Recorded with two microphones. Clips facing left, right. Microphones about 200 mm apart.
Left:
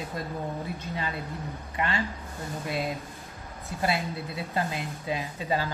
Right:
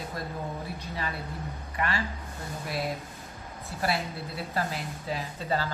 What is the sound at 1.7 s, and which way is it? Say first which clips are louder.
Speech: left 1 dB; 25° left (ahead or behind).